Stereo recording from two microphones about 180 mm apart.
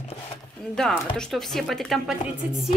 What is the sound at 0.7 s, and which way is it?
Speech, centre (ahead or behind).